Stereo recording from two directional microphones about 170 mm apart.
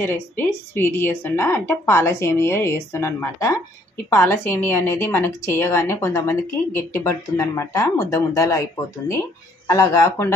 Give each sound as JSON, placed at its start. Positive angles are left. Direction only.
{"t": 0.0, "sound": "a woman's voice", "side_deg": 15}
{"t": 9.7, "sound": "a woman's voice", "side_deg": 20}